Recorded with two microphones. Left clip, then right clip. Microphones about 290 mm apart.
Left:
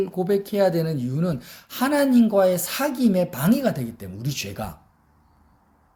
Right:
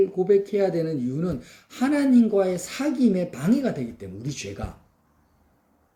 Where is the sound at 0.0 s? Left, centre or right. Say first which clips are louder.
Right 3 dB; left.